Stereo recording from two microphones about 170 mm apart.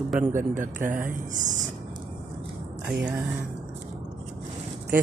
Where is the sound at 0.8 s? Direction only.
50° right (ahead or behind).